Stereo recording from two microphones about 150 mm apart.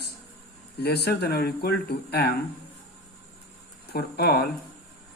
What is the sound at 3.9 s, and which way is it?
Speech, 90° left.